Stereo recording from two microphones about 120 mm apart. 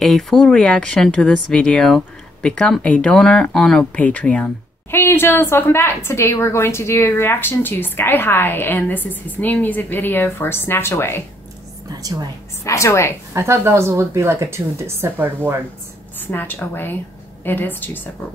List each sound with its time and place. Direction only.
0.0 s a woman's voice: 5° left (ahead or behind); by 11.2 s 20° left (ahead or behind)
11.9 s a woman's voice: 30° right (ahead or behind)
12.6 s a woman's voice: 25° left (ahead or behind)
13.3 s a woman's voice: 25° right (ahead or behind)
16.3 s speech: 15° left (ahead or behind)